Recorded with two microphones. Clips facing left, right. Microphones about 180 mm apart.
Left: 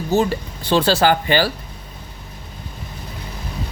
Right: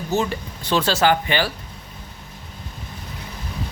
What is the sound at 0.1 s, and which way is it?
Speech, 35° left (ahead or behind).